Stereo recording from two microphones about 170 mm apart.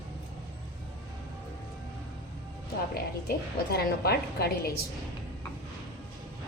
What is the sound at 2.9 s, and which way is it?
A woman's voice, 65° left (ahead or behind).